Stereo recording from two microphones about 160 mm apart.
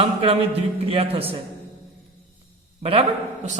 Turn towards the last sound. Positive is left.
turn(degrees=-40)  # may be behind; listen again after turning